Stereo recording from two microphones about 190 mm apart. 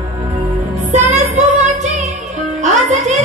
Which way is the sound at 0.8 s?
40° right (ahead or behind).